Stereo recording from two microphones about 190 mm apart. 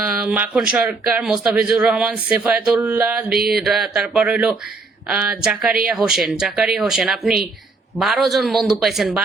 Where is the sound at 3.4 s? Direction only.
55° right (ahead or behind).